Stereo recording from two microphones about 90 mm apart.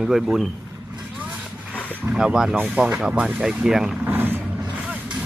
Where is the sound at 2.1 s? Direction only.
5° right (ahead or behind).